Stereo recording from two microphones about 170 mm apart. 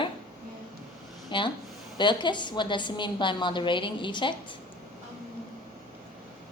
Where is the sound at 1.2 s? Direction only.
30° left (ahead or behind).